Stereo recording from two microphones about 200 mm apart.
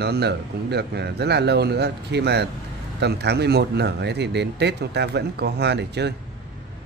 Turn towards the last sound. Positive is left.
turn(degrees=-55)  # may be behind; listen again after turning